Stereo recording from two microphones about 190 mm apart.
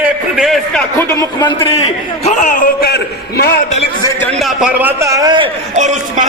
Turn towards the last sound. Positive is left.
turn(degrees=-40)  # may be behind; listen again after turning